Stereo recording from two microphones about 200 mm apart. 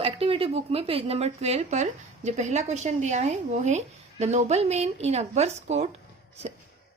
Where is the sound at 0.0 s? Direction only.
30° right (ahead or behind).